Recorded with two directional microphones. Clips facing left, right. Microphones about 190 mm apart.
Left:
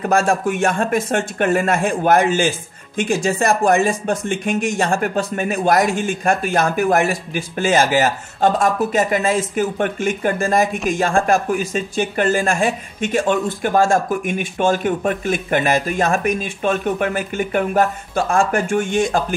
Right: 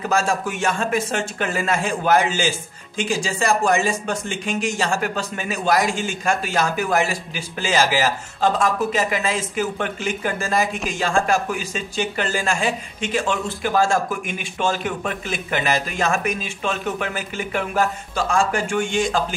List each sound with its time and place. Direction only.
0.0 s speech: 55° left (ahead or behind)